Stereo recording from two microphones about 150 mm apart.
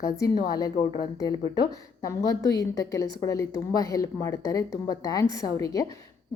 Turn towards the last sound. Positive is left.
turn(degrees=20)  # may be behind; listen again after turning